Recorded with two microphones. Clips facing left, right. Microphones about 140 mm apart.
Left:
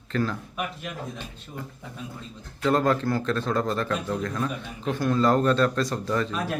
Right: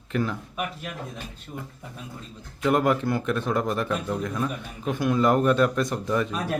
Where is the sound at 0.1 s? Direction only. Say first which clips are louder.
Even; 15° right (ahead or behind).